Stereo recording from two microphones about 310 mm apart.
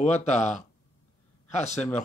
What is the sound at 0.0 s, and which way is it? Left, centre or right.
Speech, left.